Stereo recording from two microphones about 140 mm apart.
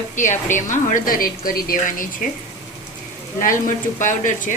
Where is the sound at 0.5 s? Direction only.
65° left (ahead or behind).